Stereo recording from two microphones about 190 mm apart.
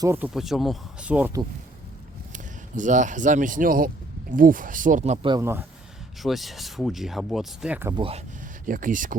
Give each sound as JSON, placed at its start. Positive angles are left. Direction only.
{"t": 0.0, "sound": "speech", "side_deg": -15}
{"t": 0.3, "sound": "speech", "side_deg": 0}
{"t": 2.3, "sound": "a man's voice", "side_deg": -40}
{"t": 5.4, "sound": "speech", "side_deg": -15}
{"t": 6.2, "sound": "speech", "side_deg": 0}
{"t": 7.9, "sound": "speech", "side_deg": -30}
{"t": 8.6, "sound": "speech", "side_deg": -45}